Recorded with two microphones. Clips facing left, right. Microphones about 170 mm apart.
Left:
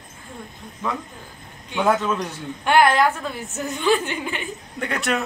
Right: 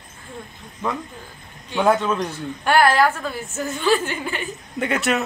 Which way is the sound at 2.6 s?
20° left (ahead or behind).